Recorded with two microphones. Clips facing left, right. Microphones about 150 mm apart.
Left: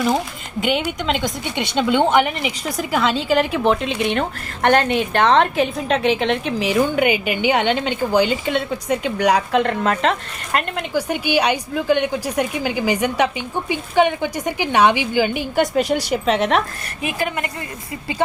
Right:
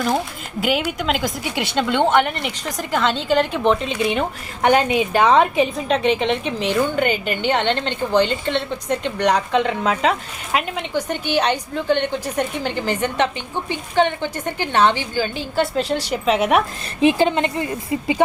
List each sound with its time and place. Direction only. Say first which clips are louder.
0.6 s a woman's voice: even; centre (ahead or behind); by 16.1 s 15° left (ahead or behind)
16.1 s speech: right 2 dB; centre (ahead or behind)
17.0 s a woman's voice: right 8 dB; 25° right (ahead or behind)